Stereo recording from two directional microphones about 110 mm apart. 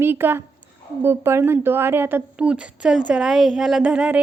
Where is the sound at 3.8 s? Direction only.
10° right (ahead or behind).